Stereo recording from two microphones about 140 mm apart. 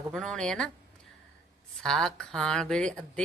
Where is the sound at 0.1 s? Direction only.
5° left (ahead or behind).